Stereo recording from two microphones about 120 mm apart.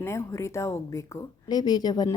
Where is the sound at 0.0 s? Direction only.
25° left (ahead or behind).